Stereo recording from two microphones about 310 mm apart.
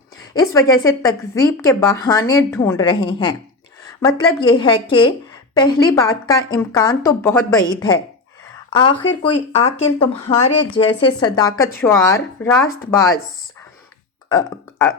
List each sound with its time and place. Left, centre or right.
0.3 s a woman's voice: centre
9.6 s a woman's voice: centre
14.3 s speech: centre